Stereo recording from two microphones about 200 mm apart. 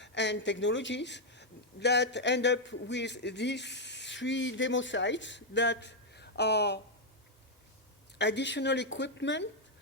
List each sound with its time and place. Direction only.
0.0 s a woman's voice: 60° left (ahead or behind)
8.2 s a woman's voice: 60° left (ahead or behind)